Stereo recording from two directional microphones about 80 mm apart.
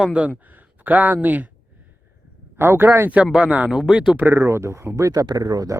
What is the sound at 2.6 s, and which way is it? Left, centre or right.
Speech, right.